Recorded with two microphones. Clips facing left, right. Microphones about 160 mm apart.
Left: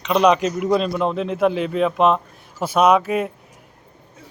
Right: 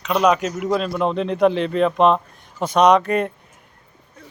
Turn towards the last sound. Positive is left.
turn(degrees=5)  # may be behind; listen again after turning